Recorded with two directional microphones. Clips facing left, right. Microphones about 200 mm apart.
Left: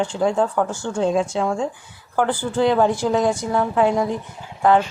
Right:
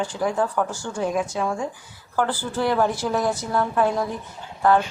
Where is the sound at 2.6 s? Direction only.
20° left (ahead or behind).